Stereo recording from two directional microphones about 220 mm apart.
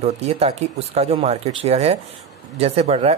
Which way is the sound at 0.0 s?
30° right (ahead or behind).